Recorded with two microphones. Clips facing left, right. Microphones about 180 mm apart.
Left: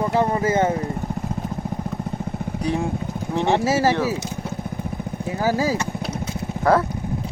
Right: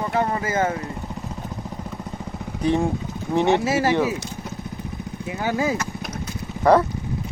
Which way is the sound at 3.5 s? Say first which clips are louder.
Left 1 dB; 40° left (ahead or behind).